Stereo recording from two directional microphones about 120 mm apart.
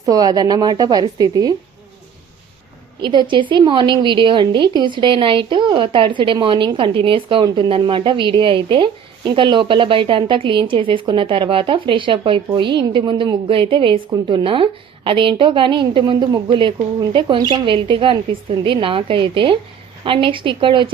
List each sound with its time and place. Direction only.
0.0 s a woman's voice: 30° right (ahead or behind)
3.0 s speech: 40° right (ahead or behind)